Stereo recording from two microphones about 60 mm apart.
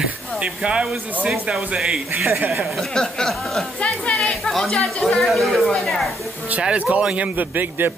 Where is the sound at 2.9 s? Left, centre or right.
Centre.